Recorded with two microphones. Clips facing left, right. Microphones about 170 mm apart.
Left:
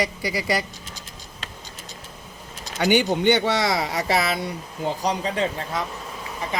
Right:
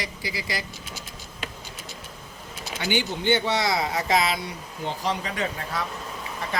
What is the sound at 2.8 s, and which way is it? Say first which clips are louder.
Speech: left 7 dB; 55° left (ahead or behind).